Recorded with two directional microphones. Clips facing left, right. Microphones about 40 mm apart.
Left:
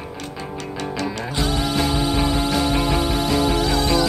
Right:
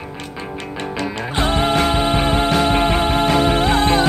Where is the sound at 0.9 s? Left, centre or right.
Right.